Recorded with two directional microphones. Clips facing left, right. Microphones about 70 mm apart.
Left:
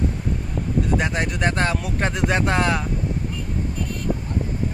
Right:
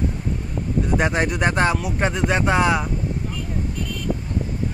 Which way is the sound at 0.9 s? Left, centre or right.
Right.